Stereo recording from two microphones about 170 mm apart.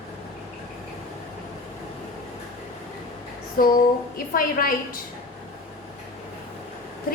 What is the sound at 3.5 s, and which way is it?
A woman's voice, 55° left (ahead or behind).